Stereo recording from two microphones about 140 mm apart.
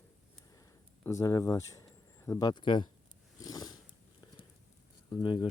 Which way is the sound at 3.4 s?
30° left (ahead or behind).